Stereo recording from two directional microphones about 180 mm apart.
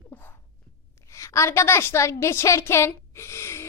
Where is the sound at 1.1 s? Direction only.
15° left (ahead or behind).